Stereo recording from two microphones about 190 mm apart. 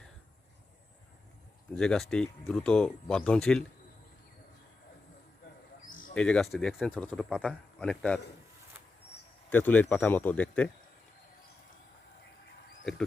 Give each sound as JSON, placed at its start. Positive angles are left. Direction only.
{"t": 1.7, "sound": "a man's voice", "side_deg": 5}
{"t": 5.9, "sound": "a sound", "side_deg": 45}
{"t": 6.1, "sound": "a man's voice", "side_deg": 5}
{"t": 9.5, "sound": "speech", "side_deg": 10}
{"t": 12.8, "sound": "speech", "side_deg": 5}